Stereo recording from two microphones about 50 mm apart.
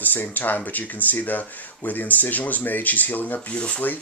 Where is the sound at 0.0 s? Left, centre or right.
Left.